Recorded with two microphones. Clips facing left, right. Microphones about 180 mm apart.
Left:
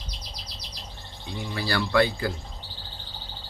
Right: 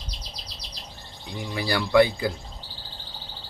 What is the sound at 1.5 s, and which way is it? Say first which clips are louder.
Speech: right 4 dB; 15° right (ahead or behind).